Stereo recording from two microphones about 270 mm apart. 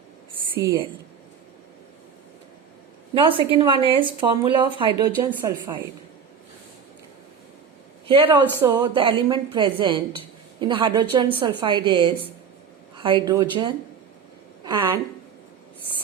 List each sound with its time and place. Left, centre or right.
0.5 s a woman's voice: centre
3.2 s a woman's voice: centre
8.0 s a woman's voice: centre